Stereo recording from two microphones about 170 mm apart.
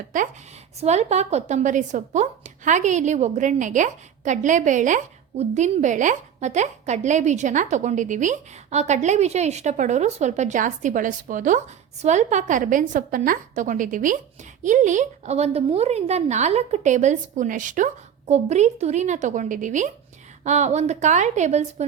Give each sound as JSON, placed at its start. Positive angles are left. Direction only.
{"t": 0.8, "sound": "a woman's voice", "side_deg": -40}